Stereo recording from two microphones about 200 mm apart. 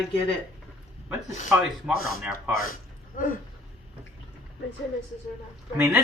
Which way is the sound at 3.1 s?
45° left (ahead or behind).